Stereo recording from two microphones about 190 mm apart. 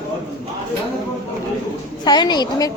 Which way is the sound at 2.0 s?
20° left (ahead or behind).